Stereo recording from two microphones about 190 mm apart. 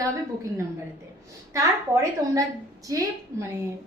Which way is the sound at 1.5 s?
15° right (ahead or behind).